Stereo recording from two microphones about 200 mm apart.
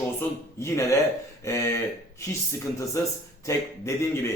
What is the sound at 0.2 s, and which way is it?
A man's voice, 15° left (ahead or behind).